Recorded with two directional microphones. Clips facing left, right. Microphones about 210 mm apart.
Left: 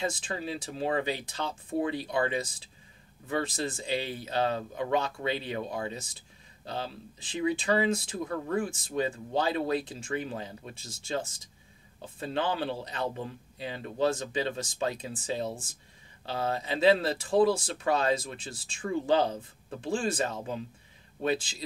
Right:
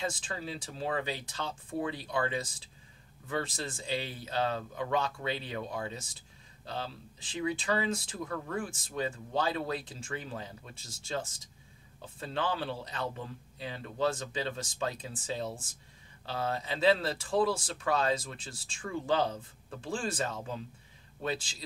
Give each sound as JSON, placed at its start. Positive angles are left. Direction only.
{"t": 0.0, "sound": "speech", "side_deg": 20}
{"t": 7.3, "sound": "speech", "side_deg": 15}